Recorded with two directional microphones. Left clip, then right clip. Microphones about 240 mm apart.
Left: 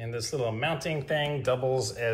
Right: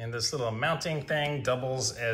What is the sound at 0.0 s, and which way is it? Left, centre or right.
Speech, centre.